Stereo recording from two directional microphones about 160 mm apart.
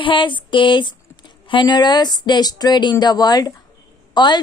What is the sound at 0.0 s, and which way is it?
A woman's voice, 30° left (ahead or behind).